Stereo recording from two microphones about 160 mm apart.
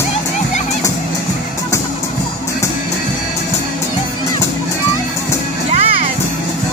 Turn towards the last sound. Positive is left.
turn(degrees=-35)  # may be behind; listen again after turning